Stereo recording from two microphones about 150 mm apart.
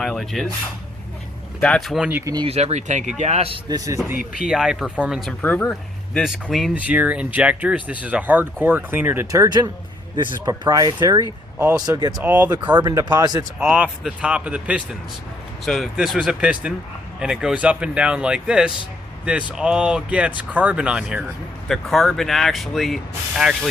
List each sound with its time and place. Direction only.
0.0 s a sound: centre (ahead or behind)
1.6 s speech: 5° left (ahead or behind)
2.0 s speech: 15° right (ahead or behind)
2.3 s speech: 35° right (ahead or behind)
2.6 s speech: 50° right (ahead or behind)
3.7 s speech: 20° right (ahead or behind)
4.4 s speech: 5° right (ahead or behind)
5.4 s speech: 10° left (ahead or behind)
6.1 s speech: centre (ahead or behind); by 12.1 s 25° right (ahead or behind)
12.2 s speech: 10° right (ahead or behind)
12.7 s speech: 25° right (ahead or behind)
13.7 s speech: 10° right (ahead or behind)